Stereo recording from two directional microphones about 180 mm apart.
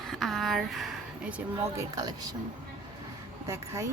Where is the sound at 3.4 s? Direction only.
15° right (ahead or behind).